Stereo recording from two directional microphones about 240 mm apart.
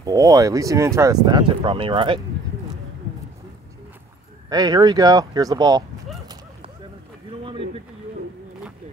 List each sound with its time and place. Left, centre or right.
0.0 s speech: centre
4.5 s speech: centre
7.4 s a sound: right